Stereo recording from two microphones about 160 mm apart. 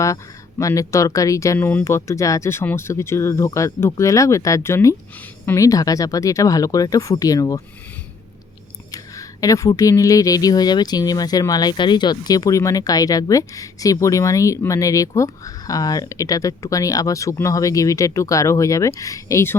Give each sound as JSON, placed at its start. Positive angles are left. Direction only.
{"t": 0.6, "sound": "speech", "side_deg": 20}
{"t": 8.9, "sound": "speech", "side_deg": 20}